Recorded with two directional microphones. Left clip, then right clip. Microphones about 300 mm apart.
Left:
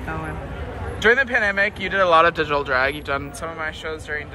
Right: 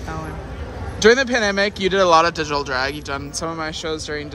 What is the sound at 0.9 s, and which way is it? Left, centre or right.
Speech, right.